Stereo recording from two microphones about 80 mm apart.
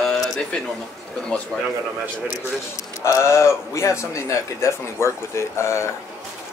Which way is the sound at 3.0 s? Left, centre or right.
Left.